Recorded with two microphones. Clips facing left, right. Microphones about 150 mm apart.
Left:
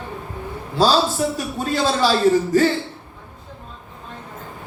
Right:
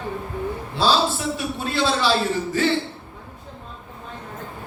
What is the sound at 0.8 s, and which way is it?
A man's voice, 40° left (ahead or behind).